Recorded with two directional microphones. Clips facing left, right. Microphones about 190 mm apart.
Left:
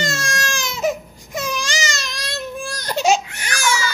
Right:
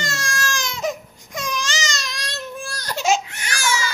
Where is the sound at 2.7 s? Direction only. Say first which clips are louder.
Left 3 dB; 20° left (ahead or behind).